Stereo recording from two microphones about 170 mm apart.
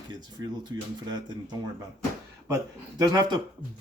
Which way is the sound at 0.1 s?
25° right (ahead or behind).